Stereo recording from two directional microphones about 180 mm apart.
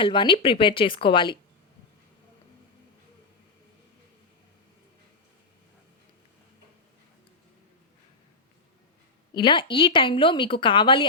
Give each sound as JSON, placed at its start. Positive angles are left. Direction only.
{"t": 0.0, "sound": "a woman's voice", "side_deg": 25}
{"t": 9.3, "sound": "a woman's voice", "side_deg": 25}